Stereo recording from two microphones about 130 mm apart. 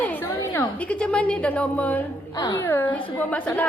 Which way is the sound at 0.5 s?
10° left (ahead or behind).